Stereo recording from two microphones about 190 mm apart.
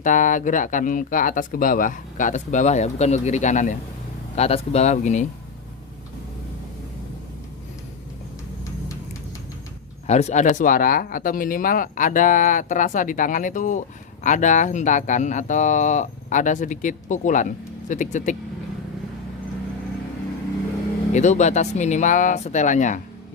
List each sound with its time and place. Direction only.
0.0 s speech: 45° left (ahead or behind)
10.1 s speech: 35° left (ahead or behind)
21.1 s speech: 40° left (ahead or behind)